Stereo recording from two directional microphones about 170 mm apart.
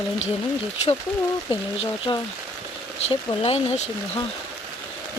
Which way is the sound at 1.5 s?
30° left (ahead or behind).